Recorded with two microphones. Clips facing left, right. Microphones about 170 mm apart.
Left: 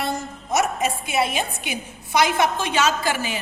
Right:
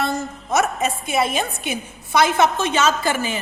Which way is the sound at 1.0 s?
50° right (ahead or behind).